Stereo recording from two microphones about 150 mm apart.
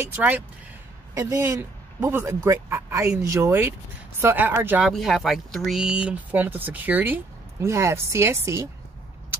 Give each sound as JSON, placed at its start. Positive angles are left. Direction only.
{"t": 0.0, "sound": "speech", "side_deg": -10}
{"t": 4.8, "sound": "speech", "side_deg": 0}